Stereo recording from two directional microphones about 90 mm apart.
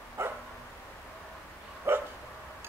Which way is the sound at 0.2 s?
30° right (ahead or behind).